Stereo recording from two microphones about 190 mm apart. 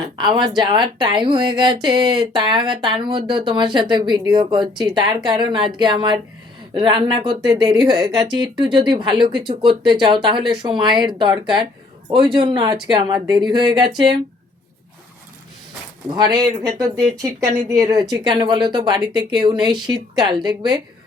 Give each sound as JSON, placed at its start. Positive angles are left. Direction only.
{"t": 0.0, "sound": "speech", "side_deg": -25}
{"t": 16.0, "sound": "speech", "side_deg": -20}